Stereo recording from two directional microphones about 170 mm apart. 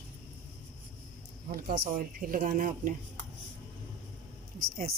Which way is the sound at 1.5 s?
60° right (ahead or behind).